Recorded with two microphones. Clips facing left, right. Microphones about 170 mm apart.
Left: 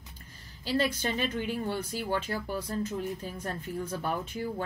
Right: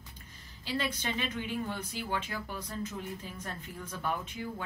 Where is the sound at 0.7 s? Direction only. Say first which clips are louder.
Left 5 dB; 40° left (ahead or behind).